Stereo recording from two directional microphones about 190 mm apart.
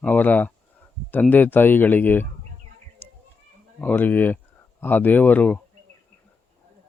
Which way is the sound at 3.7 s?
10° left (ahead or behind).